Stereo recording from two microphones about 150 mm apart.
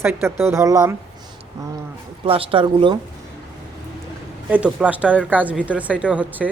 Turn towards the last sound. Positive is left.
turn(degrees=-10)  # may be behind; listen again after turning